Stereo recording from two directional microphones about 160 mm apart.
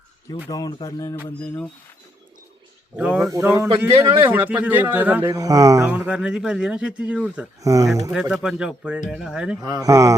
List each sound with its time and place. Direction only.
0.5 s speech: 25° left (ahead or behind)
2.9 s speech: 5° right (ahead or behind)
3.3 s speech: 15° right (ahead or behind)
5.3 s speech: 20° right (ahead or behind)
5.9 s speech: 5° right (ahead or behind)
7.6 s speech: 20° right (ahead or behind)
8.1 s speech: 5° right (ahead or behind)
9.6 s speech: 25° right (ahead or behind)